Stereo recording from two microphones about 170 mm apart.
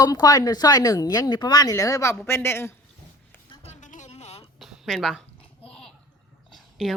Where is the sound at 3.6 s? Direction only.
45° left (ahead or behind).